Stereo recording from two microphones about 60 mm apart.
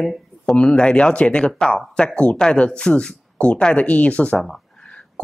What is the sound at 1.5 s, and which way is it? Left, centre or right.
Speech, centre.